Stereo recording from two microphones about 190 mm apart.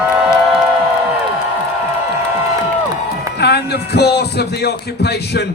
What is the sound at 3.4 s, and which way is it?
A man's voice, 60° left (ahead or behind).